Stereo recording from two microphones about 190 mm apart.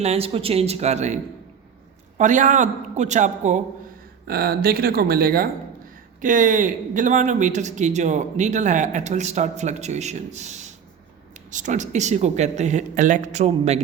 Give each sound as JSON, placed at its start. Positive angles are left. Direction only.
{"t": 0.0, "sound": "speech", "side_deg": -30}
{"t": 4.3, "sound": "speech", "side_deg": -55}